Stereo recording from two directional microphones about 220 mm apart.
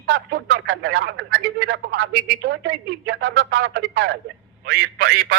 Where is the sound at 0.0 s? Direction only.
50° right (ahead or behind).